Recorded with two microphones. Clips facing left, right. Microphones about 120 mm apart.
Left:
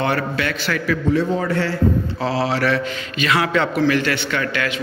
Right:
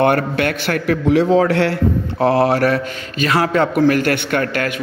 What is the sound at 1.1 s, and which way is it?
A man's voice, 80° right.